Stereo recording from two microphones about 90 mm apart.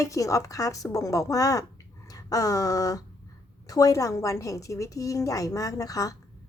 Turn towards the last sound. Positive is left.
turn(degrees=40)  # may be behind; listen again after turning